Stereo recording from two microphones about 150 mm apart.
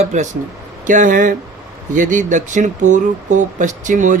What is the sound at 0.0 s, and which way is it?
A man's voice, 50° right (ahead or behind).